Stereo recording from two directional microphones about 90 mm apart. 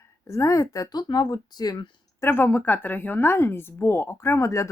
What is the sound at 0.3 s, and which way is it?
Speech, 35° left (ahead or behind).